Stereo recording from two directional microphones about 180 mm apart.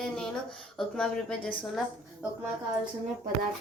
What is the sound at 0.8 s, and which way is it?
Speech, 5° left (ahead or behind).